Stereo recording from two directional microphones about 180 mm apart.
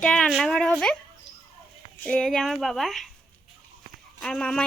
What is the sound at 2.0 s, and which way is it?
Speech, 5° left (ahead or behind).